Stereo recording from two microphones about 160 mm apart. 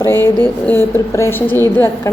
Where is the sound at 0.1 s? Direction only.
15° left (ahead or behind).